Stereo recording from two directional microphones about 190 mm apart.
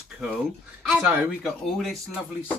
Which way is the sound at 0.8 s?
5° right (ahead or behind).